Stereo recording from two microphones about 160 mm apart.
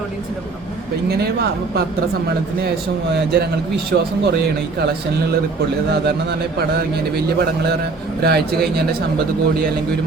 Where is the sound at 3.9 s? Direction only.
90° right.